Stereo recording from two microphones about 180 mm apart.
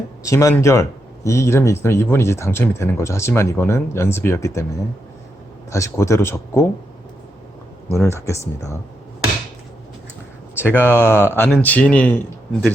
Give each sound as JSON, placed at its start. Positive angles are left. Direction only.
{"t": 0.3, "sound": "speech", "side_deg": 15}
{"t": 5.7, "sound": "speech", "side_deg": 15}
{"t": 7.9, "sound": "speech", "side_deg": 15}
{"t": 10.8, "sound": "speech", "side_deg": 10}